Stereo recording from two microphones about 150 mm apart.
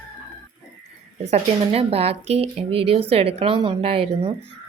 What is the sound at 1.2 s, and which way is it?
Speech, 45° right (ahead or behind).